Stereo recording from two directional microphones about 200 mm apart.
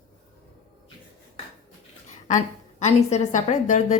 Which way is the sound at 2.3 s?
35° left (ahead or behind).